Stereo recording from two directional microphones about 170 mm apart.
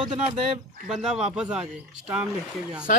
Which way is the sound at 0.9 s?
5° right (ahead or behind).